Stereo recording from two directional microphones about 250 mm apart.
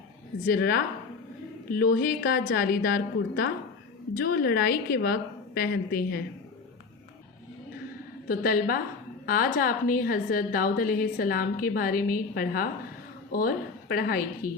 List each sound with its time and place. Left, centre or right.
0.4 s a woman's voice: left
8.3 s a woman's voice: left